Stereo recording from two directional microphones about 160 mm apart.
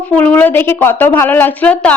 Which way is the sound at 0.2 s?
10° left (ahead or behind).